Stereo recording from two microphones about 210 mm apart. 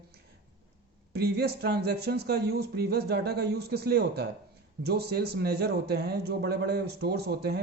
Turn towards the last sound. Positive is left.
turn(degrees=-50)  # may be behind; listen again after turning